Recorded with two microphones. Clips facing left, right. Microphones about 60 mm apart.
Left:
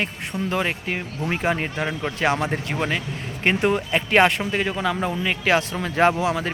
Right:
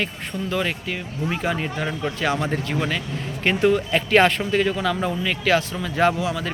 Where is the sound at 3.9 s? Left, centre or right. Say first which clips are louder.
Right 1 dB; centre.